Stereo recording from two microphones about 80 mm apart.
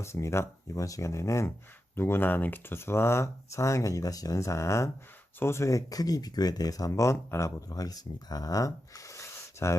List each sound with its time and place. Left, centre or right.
0.0 s speech: left
7.7 s speech: left